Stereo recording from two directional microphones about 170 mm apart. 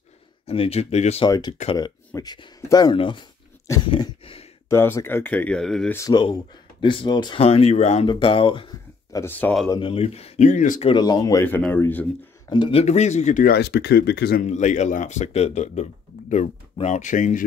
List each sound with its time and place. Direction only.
0.5 s speech: 35° left (ahead or behind)
1.2 s speech: 25° left (ahead or behind)
3.9 s a sound: 30° left (ahead or behind)
4.6 s speech: 15° left (ahead or behind)
5.9 s speech: 25° left (ahead or behind)
9.1 s speech: 15° left (ahead or behind)
9.8 s speech: 35° left (ahead or behind)
10.9 s speech: 25° left (ahead or behind)
11.4 s speech: 10° left (ahead or behind)
12.4 s speech: 30° left (ahead or behind); by 14.4 s 75° left (ahead or behind)
14.4 s speech: 45° left (ahead or behind)